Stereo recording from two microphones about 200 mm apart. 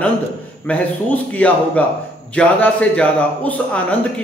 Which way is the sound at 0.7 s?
10° left (ahead or behind).